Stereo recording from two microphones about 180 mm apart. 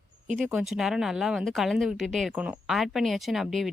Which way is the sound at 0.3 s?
Centre (ahead or behind).